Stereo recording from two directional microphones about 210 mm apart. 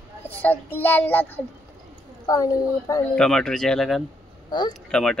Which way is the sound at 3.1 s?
5° left (ahead or behind).